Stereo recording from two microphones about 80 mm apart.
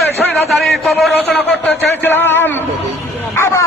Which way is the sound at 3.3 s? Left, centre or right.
Left.